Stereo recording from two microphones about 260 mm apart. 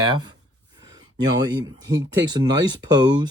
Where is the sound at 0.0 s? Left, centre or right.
Centre.